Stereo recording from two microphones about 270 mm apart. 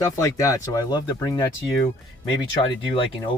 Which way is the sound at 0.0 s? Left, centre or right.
Centre.